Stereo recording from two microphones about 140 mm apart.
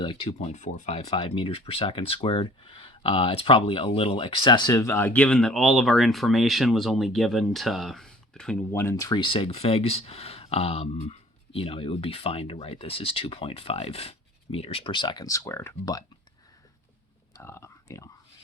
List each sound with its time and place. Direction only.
0.0 s speech: 35° left (ahead or behind)
0.3 s speech: 55° left (ahead or behind); by 8.8 s 5° left (ahead or behind)
8.8 s speech: 20° left (ahead or behind)
17.3 s a sound: 20° left (ahead or behind)